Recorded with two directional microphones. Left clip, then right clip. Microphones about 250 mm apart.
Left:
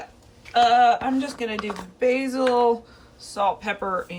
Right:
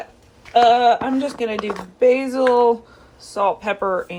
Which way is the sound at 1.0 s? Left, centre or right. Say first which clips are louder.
Right 4 dB; left.